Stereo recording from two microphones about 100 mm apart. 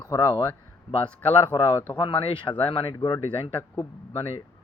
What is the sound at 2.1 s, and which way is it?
Speech, 60° left (ahead or behind).